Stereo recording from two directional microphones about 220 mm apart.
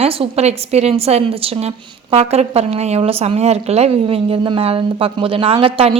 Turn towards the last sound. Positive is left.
turn(degrees=-25)  # may be behind; listen again after turning